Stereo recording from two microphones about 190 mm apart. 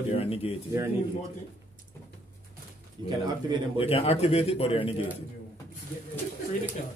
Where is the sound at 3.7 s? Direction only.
30° left (ahead or behind).